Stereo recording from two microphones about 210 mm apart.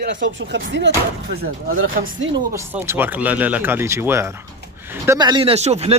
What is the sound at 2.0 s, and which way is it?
Speech, 40° right (ahead or behind).